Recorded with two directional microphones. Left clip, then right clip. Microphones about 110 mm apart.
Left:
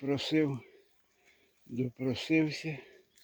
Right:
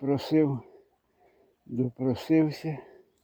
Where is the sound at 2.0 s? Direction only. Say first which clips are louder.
Right 5 dB; 75° right (ahead or behind).